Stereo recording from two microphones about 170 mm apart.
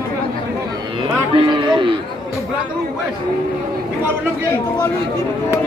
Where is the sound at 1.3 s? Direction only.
30° right (ahead or behind).